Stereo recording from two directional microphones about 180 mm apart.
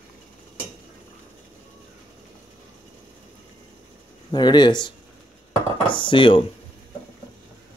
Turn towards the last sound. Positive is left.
turn(degrees=30)  # may be behind; listen again after turning